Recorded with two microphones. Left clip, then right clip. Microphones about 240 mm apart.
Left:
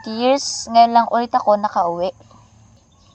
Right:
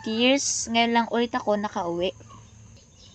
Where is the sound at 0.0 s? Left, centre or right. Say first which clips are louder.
Left 5 dB; left.